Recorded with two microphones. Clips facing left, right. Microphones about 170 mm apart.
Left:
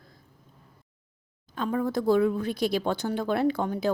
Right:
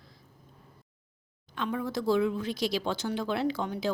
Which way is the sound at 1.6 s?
45° left (ahead or behind).